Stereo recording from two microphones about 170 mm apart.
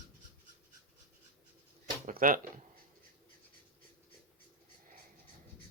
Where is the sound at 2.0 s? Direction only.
55° right (ahead or behind).